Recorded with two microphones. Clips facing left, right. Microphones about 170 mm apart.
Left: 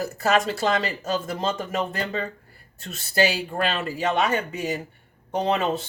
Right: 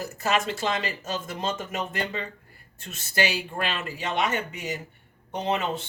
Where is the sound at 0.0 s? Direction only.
35° left (ahead or behind).